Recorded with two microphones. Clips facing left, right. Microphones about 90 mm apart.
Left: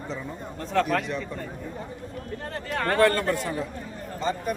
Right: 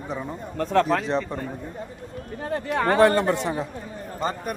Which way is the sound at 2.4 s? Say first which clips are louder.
Right 5 dB; 15° right (ahead or behind).